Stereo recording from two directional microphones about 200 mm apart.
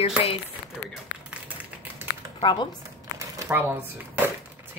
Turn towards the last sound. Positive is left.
turn(degrees=-10)  # may be behind; listen again after turning